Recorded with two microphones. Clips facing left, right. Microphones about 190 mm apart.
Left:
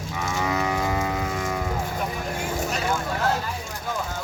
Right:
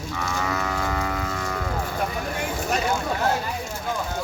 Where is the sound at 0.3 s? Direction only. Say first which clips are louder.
Left 3 dB; 15° left (ahead or behind).